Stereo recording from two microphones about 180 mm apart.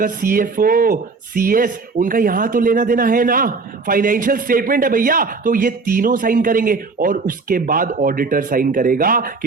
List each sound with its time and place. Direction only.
0.0 s speech: 50° right (ahead or behind)